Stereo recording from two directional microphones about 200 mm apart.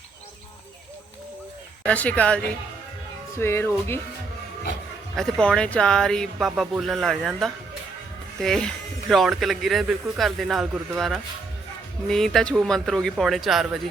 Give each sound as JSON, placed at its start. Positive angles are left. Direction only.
{"t": 1.8, "sound": "speech", "side_deg": 5}
{"t": 5.1, "sound": "speech", "side_deg": 5}